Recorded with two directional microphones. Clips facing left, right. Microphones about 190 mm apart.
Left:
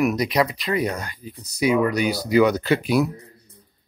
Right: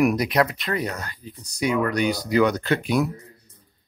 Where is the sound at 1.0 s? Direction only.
10° left (ahead or behind).